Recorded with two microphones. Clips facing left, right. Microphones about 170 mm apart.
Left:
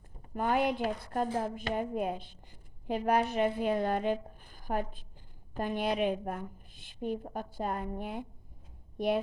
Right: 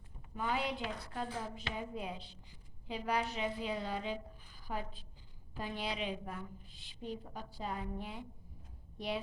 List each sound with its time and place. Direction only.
0.2 s a woman's voice: 50° left (ahead or behind)